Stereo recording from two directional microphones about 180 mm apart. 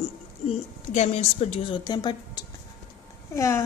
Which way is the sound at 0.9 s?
40° left (ahead or behind).